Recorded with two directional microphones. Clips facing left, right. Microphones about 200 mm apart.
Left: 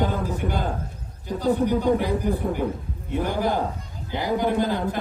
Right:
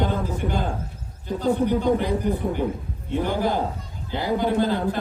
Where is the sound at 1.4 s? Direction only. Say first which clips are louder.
Even; 10° left (ahead or behind).